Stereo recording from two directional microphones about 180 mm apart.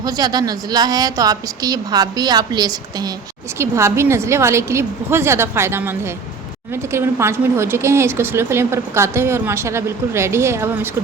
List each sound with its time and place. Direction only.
0.0 s a woman's voice: 20° right (ahead or behind)